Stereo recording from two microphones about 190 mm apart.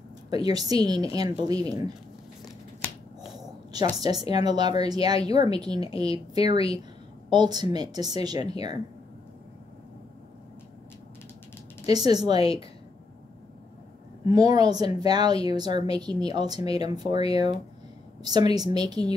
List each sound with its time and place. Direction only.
0.3 s speech: 20° right (ahead or behind)
4.0 s speech: 20° right (ahead or behind)
11.8 s speech: 20° right (ahead or behind)
12.4 s a woman's voice: 30° left (ahead or behind)
14.3 s speech: 20° right (ahead or behind)